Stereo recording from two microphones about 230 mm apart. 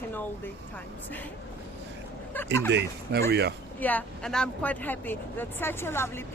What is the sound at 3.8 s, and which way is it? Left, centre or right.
Speech, centre.